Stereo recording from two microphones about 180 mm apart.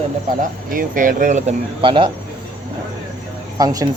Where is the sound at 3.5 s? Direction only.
20° right (ahead or behind).